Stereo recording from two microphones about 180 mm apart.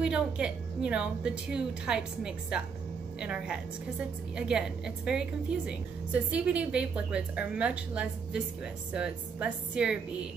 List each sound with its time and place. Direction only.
0.0 s a woman's voice: 5° right (ahead or behind)
6.3 s a woman's voice: 5° right (ahead or behind)